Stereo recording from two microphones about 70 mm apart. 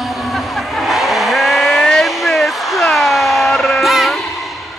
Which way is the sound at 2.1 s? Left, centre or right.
Centre.